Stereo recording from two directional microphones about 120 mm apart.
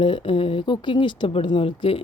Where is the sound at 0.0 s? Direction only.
45° left (ahead or behind).